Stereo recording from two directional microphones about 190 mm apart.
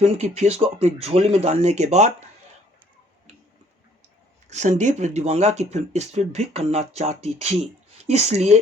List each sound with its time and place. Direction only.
0.0 s speech: 35° right (ahead or behind)
4.4 s speech: 35° right (ahead or behind)